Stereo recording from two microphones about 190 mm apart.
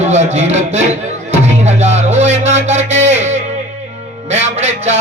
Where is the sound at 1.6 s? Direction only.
35° right (ahead or behind).